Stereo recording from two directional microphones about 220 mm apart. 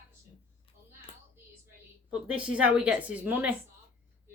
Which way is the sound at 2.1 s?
5° right (ahead or behind).